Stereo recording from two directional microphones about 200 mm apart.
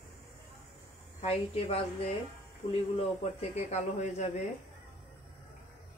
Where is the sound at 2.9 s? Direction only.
35° left (ahead or behind).